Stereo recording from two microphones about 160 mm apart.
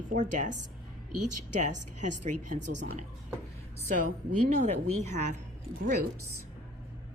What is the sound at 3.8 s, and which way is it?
A woman's voice, 55° right (ahead or behind).